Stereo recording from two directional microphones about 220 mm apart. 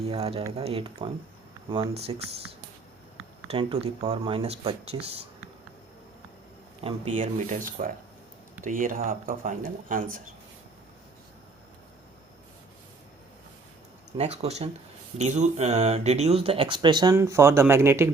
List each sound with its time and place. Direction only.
0.1 s speech: 25° right (ahead or behind)
3.5 s speech: 25° right (ahead or behind)
6.8 s speech: 25° right (ahead or behind)
14.2 s speech: 30° right (ahead or behind); by 18.1 s 10° right (ahead or behind)